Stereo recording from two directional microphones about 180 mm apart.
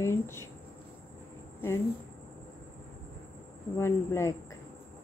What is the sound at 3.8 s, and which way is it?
Speech, 15° left (ahead or behind).